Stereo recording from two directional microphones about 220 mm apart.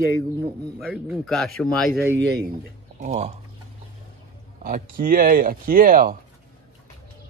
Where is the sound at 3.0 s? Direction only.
30° right (ahead or behind).